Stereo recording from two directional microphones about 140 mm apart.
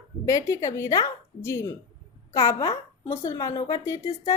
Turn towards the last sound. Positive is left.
turn(degrees=25)  # may be behind; listen again after turning